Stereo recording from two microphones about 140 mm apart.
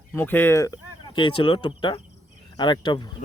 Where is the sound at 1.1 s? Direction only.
35° left (ahead or behind).